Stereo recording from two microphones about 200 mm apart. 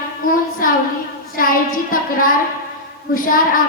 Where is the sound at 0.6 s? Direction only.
45° left (ahead or behind).